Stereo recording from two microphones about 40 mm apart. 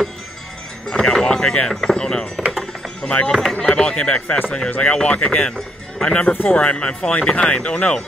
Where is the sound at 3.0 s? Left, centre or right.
Left.